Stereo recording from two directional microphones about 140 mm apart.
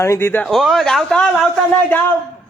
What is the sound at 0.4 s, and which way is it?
A man's voice, centre (ahead or behind).